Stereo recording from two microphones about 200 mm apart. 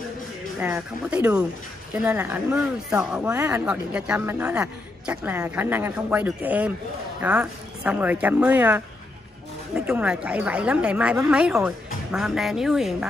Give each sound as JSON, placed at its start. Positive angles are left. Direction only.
{"t": 0.6, "sound": "a woman's voice", "side_deg": -10}